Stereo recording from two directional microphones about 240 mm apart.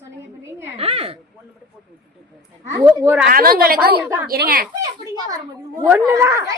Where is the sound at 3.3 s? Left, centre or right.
Right.